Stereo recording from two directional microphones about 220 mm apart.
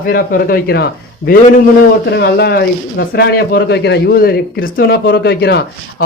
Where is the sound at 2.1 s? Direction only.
50° left (ahead or behind).